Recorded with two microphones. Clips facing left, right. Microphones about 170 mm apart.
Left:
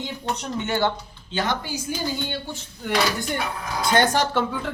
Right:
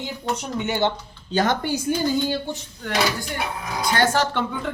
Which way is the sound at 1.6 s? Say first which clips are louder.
Right 7 dB; 60° right (ahead or behind).